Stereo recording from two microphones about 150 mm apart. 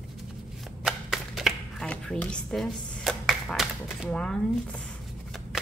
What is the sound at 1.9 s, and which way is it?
Speech, 5° left (ahead or behind).